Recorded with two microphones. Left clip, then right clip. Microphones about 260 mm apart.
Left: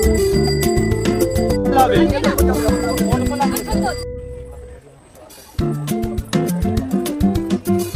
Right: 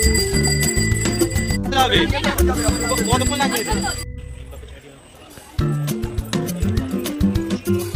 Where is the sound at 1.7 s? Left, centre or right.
Left.